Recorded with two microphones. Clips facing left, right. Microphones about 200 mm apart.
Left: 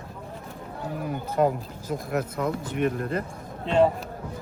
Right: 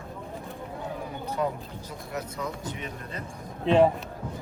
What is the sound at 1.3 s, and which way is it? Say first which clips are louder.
Speech: left 7 dB; 50° left (ahead or behind).